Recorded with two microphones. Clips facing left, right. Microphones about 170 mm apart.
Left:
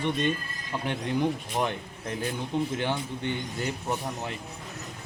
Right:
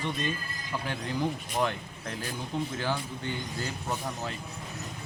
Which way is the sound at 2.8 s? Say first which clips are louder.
Left 3 dB; 25° left (ahead or behind).